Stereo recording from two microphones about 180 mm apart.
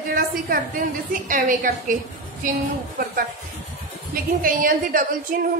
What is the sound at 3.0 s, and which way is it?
A woman's voice, 55° right (ahead or behind).